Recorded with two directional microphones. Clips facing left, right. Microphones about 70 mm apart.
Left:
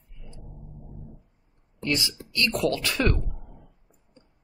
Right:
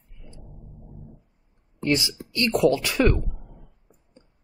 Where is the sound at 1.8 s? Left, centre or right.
Right.